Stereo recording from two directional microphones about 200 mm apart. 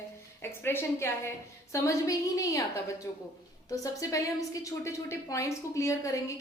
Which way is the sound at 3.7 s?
15° left (ahead or behind).